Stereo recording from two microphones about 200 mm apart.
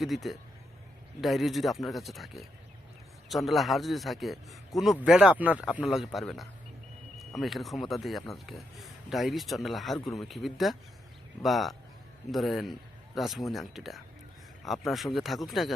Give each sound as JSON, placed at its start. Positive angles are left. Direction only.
{"t": 0.0, "sound": "a man's voice", "side_deg": 0}